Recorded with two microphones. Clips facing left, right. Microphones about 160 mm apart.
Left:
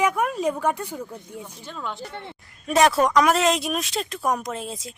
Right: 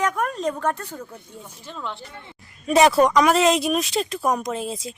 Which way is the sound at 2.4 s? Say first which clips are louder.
Right 2 dB; centre (ahead or behind).